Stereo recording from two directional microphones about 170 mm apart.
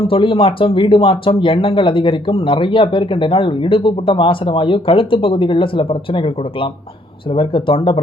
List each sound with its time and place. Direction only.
0.1 s speech: 30° left (ahead or behind)